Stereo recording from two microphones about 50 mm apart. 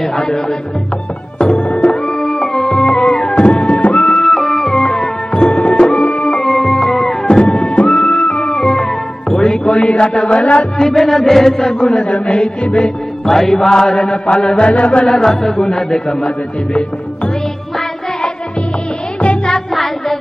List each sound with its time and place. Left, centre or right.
0.0 s speech: centre
1.4 s music: left
2.0 s music: centre
5.3 s music: centre
6.4 s music: centre
8.0 s music: centre; by 10.7 s left
10.8 s speech: centre
12.3 s music: centre
13.2 s speech: centre
14.2 s music: left
15.0 s speech: centre
19.2 s music: centre
19.7 s music: centre